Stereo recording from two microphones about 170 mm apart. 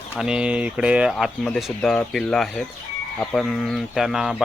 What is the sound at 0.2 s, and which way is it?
Speech, 5° right (ahead or behind).